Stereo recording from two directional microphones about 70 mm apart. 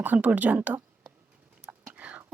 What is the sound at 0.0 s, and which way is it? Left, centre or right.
Speech, right.